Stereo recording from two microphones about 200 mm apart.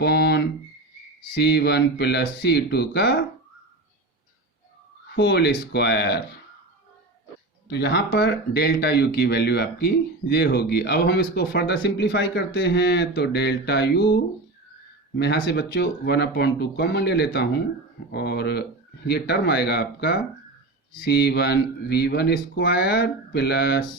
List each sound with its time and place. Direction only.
0.0 s a sound: 55° left (ahead or behind)
1.4 s speech: 55° left (ahead or behind)
5.1 s speech: 55° left (ahead or behind)
7.7 s speech: 55° left (ahead or behind)
15.2 s speech: 55° left (ahead or behind)